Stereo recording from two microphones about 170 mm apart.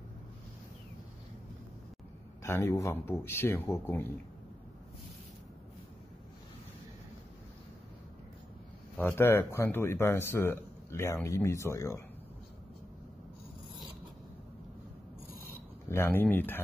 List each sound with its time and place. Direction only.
2.4 s speech: 15° left (ahead or behind)
8.9 s speech: 10° left (ahead or behind)
15.9 s speech: 10° left (ahead or behind)